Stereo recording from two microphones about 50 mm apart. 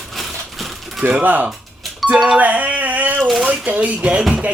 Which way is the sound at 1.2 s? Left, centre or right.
Right.